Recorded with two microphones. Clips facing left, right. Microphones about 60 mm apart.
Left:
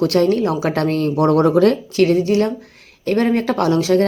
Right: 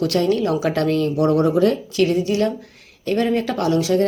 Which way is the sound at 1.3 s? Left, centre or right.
Left.